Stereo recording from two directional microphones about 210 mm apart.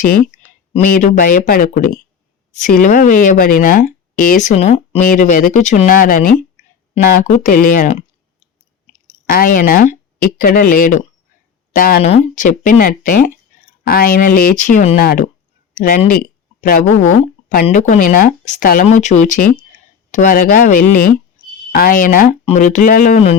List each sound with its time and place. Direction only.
0.7 s speech: 40° left (ahead or behind)
9.3 s speech: 40° left (ahead or behind)
12.0 s speech: 30° left (ahead or behind)